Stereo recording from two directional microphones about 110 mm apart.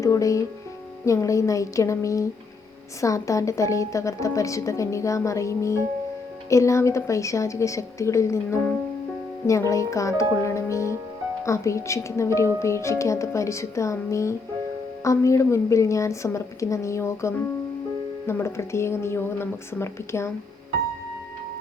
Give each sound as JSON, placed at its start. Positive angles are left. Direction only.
{"t": 0.0, "sound": "a woman's voice", "side_deg": 30}